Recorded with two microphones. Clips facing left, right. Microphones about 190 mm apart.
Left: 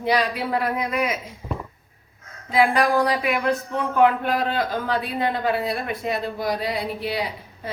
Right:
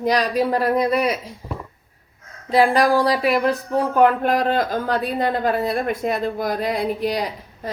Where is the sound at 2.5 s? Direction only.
35° right (ahead or behind).